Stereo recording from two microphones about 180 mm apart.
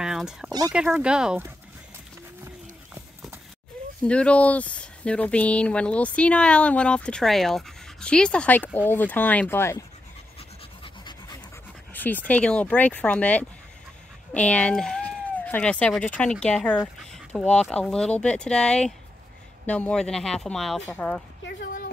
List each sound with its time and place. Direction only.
0.0 s a sound: 5° right (ahead or behind)
0.5 s speech: 20° right (ahead or behind)
0.7 s speech: 5° right (ahead or behind)
4.0 s speech: 5° left (ahead or behind)
10.8 s pant: 25° left (ahead or behind)
11.9 s dog: 10° left (ahead or behind)
12.3 s speech: 5° left (ahead or behind)